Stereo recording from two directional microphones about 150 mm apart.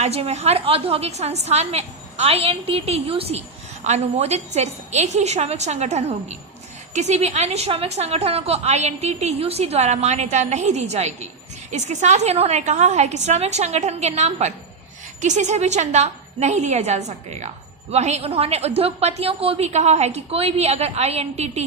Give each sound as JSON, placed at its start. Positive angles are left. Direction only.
{"t": 0.0, "sound": "a woman's voice", "side_deg": -45}